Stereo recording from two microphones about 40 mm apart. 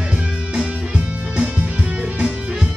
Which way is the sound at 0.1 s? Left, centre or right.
Right.